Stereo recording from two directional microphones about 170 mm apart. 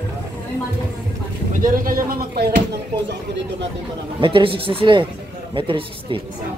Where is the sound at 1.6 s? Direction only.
55° right (ahead or behind).